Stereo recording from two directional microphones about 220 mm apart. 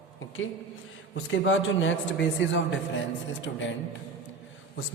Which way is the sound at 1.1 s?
60° left (ahead or behind).